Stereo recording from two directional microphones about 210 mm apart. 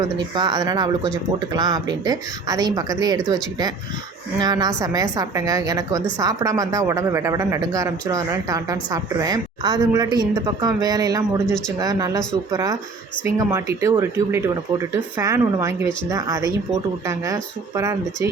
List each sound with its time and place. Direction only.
0.3 s a woman's voice: 20° right (ahead or behind)